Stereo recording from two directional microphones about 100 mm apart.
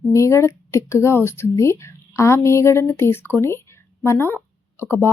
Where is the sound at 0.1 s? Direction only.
30° left (ahead or behind).